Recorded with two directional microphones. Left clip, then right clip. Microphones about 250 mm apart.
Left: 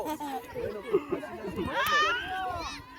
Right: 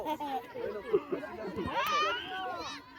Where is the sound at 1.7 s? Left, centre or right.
Left.